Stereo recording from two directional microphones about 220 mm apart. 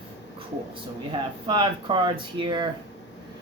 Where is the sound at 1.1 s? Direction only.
20° right (ahead or behind).